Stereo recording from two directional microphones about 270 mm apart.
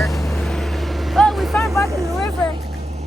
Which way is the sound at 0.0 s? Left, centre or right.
Centre.